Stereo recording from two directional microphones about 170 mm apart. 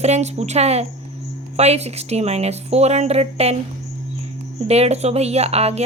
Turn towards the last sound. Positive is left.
turn(degrees=-40)  # may be behind; listen again after turning